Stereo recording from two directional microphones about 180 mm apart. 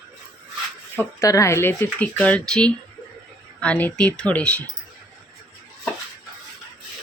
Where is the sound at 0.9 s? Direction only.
15° left (ahead or behind).